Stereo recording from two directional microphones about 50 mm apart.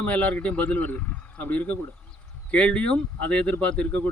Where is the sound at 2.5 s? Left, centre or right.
Left.